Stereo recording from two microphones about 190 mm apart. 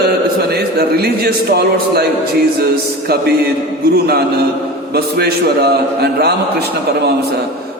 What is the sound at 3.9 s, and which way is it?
A man's voice, 55° right (ahead or behind).